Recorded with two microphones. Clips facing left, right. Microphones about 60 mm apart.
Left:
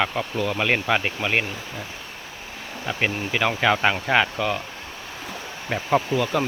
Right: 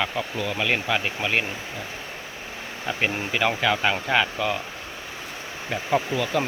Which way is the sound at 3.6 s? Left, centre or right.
Centre.